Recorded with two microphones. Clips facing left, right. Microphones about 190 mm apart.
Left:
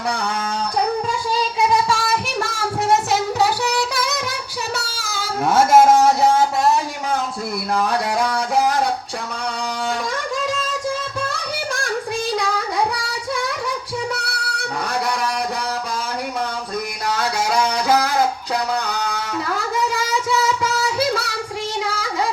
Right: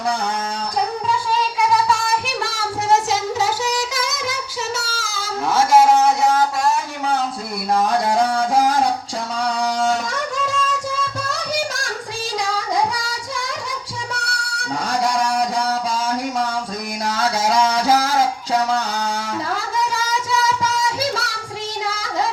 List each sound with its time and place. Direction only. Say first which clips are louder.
1.5 s child singing: even; 25° left (ahead or behind)
3.1 s music: left 2 dB; 60° left (ahead or behind)
4.9 s a sound: left 1 dB; 60° left (ahead or behind)